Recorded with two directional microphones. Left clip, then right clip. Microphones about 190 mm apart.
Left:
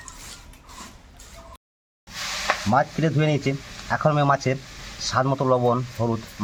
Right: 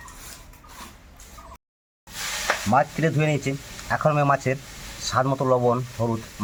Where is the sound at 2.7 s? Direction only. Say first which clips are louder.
Right 1 dB; 15° left (ahead or behind).